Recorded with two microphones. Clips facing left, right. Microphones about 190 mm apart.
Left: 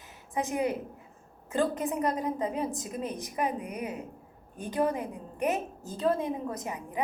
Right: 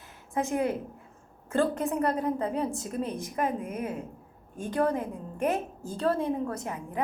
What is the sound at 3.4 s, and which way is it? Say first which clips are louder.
Speech: right 1 dB; 50° right (ahead or behind).